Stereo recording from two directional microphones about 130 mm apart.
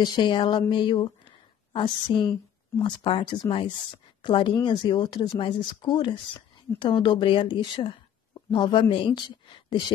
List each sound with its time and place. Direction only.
0.0 s speech: 35° left (ahead or behind)